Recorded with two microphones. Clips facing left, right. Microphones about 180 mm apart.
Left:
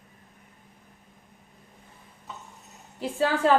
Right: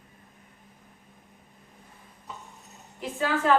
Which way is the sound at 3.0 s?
30° left (ahead or behind).